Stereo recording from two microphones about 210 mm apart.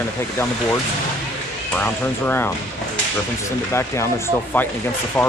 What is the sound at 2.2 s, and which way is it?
Speech, 10° left (ahead or behind).